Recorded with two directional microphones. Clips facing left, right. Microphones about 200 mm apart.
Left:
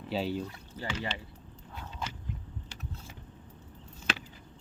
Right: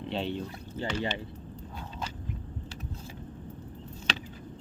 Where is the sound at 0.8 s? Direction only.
25° right (ahead or behind).